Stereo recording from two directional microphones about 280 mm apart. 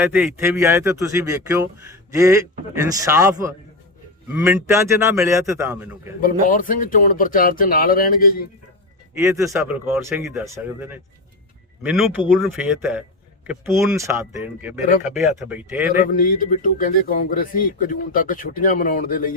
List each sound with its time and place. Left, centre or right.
0.0 s a man's voice: centre
6.4 s speech: left
9.1 s a man's voice: centre
16.0 s speech: left